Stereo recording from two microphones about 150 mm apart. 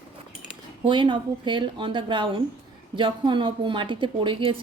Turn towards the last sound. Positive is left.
turn(degrees=-35)  # may be behind; listen again after turning